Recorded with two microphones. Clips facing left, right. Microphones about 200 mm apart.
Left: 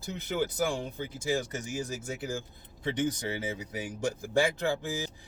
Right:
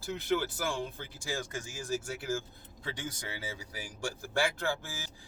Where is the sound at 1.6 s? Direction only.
20° left (ahead or behind).